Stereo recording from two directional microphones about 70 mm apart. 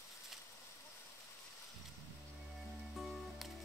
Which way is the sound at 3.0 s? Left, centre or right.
Centre.